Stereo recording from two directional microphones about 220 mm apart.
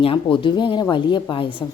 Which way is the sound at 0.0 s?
25° left (ahead or behind).